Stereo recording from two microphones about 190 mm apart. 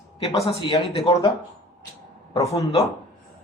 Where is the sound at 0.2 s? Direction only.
30° left (ahead or behind).